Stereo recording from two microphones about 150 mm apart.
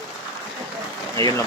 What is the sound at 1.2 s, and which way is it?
Speech, 20° left (ahead or behind).